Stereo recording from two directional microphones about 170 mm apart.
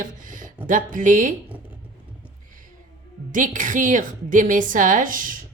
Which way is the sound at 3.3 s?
50° right (ahead or behind).